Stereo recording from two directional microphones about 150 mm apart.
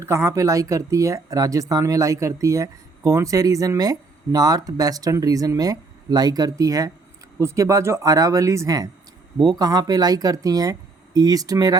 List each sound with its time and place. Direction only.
0.0 s speech: 20° right (ahead or behind)